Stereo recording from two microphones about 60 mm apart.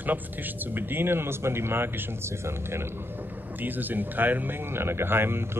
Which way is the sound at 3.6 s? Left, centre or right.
Right.